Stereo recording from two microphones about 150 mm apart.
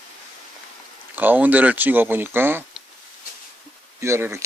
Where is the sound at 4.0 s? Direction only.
15° right (ahead or behind).